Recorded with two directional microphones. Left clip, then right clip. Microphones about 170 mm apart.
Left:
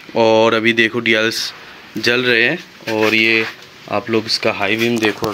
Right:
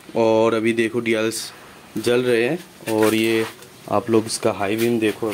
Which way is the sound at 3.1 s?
25° right (ahead or behind).